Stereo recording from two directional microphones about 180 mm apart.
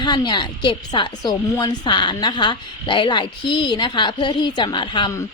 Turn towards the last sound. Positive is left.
turn(degrees=20)  # may be behind; listen again after turning